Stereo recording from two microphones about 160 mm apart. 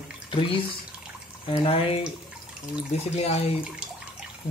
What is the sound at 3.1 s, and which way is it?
Speech, 40° left (ahead or behind).